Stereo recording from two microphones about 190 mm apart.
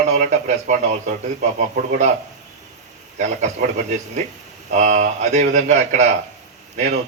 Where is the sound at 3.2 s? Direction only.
40° right (ahead or behind).